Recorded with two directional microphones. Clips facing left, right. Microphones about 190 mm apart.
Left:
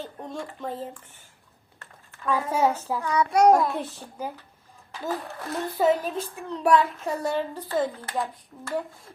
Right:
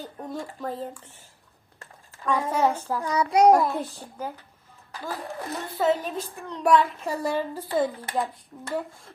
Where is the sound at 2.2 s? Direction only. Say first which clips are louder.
Even; 5° left (ahead or behind).